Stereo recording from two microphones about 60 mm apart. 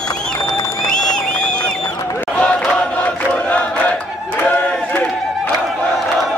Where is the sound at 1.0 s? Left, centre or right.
Centre.